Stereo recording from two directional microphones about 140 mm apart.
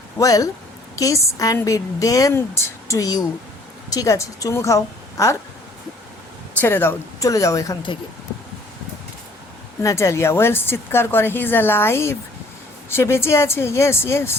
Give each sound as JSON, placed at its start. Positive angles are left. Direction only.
{"t": 0.2, "sound": "a woman's voice", "side_deg": 25}
{"t": 6.5, "sound": "a woman's voice", "side_deg": 15}
{"t": 9.8, "sound": "a woman's voice", "side_deg": 20}